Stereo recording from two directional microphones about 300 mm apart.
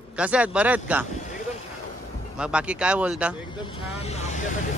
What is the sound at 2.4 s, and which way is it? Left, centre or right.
Speech, centre.